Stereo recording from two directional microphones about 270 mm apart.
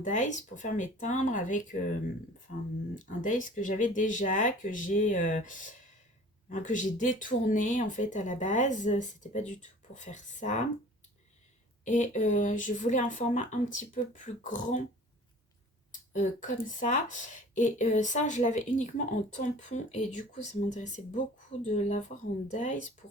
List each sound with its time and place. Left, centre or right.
0.0 s speech: left
11.9 s speech: left
16.1 s speech: left